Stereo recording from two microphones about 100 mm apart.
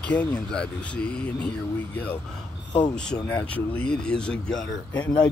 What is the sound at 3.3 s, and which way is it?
Speech, 10° left (ahead or behind).